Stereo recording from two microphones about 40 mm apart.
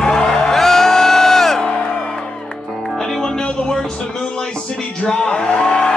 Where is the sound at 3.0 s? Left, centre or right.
Centre.